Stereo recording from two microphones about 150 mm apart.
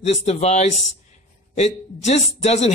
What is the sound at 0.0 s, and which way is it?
Speech, 45° left (ahead or behind).